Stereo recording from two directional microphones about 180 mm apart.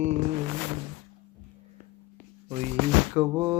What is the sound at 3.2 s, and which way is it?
Speech, 15° right (ahead or behind).